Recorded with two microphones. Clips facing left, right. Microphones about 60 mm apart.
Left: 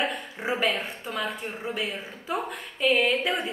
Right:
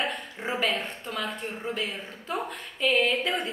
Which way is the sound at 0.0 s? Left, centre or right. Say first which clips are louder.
Left 2 dB; centre.